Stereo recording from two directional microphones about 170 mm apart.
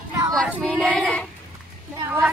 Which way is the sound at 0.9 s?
5° left (ahead or behind).